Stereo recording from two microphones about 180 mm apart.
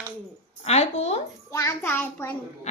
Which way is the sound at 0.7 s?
40° left (ahead or behind).